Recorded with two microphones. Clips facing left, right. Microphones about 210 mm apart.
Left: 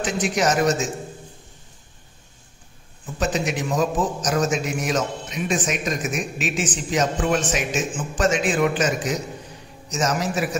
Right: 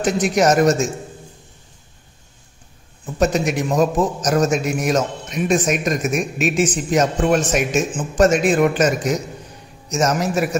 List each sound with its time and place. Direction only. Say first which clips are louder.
0.0 s a man's voice: right 5 dB; 40° right (ahead or behind)
3.2 s a man's voice: right 6 dB; 45° right (ahead or behind)